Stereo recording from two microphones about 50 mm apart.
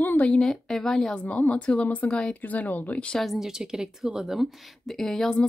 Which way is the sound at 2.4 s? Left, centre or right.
Left.